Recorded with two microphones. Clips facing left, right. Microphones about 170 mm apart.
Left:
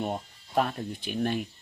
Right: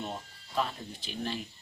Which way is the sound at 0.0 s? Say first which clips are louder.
Left 7 dB; 55° left (ahead or behind).